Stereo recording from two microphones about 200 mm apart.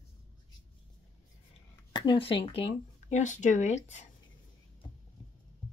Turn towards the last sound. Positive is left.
turn(degrees=35)  # may be behind; listen again after turning